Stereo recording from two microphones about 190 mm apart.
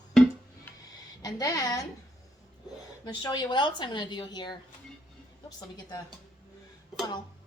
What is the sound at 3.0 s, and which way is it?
A woman's voice, 20° left (ahead or behind).